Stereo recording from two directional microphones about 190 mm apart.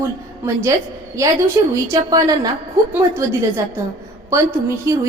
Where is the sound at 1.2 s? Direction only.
15° right (ahead or behind).